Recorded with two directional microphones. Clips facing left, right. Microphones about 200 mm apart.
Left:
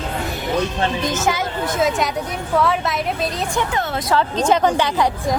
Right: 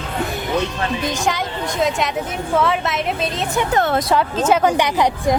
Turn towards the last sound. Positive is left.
turn(degrees=-20)  # may be behind; listen again after turning